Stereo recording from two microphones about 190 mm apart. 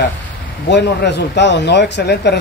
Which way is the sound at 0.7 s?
65° left (ahead or behind).